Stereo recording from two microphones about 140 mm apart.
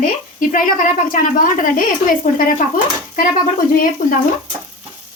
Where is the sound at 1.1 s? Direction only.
80° left.